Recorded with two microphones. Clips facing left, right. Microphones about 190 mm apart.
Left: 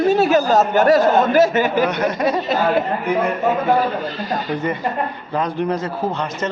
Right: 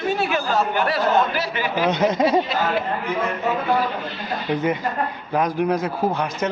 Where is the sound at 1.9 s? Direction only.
25° right (ahead or behind).